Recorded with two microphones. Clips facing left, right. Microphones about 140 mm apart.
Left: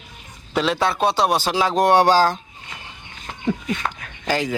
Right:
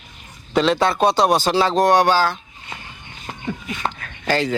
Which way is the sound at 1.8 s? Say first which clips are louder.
Left 2 dB; 25° left (ahead or behind).